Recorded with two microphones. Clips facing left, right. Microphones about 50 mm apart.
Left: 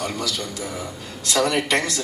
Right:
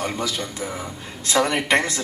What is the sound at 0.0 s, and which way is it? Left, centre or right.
Speech, right.